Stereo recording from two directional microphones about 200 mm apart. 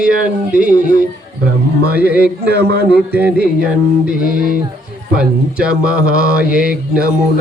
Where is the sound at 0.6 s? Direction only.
45° right (ahead or behind).